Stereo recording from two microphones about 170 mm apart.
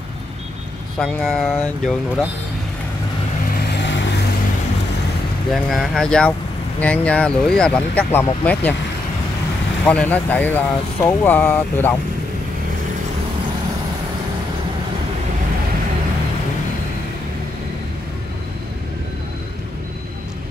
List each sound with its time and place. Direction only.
0.9 s speech: 5° left (ahead or behind)
3.5 s vehicle: 80° left
5.5 s speech: centre (ahead or behind)
9.8 s speech: 10° left (ahead or behind)